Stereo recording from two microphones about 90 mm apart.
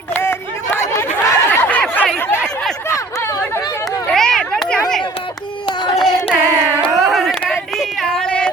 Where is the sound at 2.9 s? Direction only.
35° left (ahead or behind).